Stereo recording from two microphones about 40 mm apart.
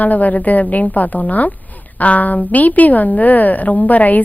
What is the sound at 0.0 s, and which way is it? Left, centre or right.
A woman's voice, left.